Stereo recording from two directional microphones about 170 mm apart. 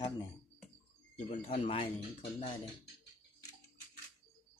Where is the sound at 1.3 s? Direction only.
35° left (ahead or behind).